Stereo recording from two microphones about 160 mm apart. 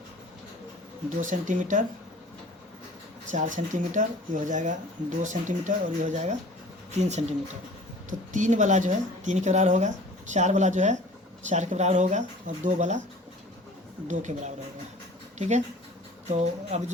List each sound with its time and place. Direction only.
1.2 s speech: 55° right (ahead or behind)
3.3 s speech: 50° right (ahead or behind)
14.1 s speech: 50° right (ahead or behind)